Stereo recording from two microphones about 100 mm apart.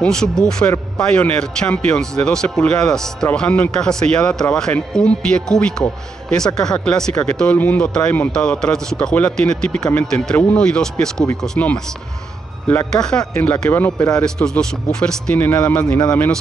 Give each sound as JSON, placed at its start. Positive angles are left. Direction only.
{"t": 0.0, "sound": "speech", "side_deg": 5}
{"t": 12.9, "sound": "speech", "side_deg": 5}
{"t": 13.4, "sound": "speech", "side_deg": 20}
{"t": 15.3, "sound": "speech", "side_deg": 15}